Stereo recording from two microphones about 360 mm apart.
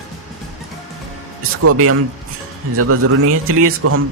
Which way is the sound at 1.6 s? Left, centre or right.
Right.